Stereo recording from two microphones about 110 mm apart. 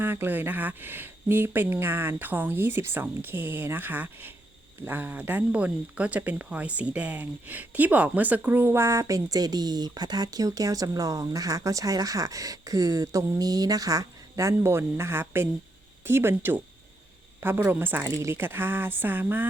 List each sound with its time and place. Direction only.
0.0 s speech: 20° right (ahead or behind)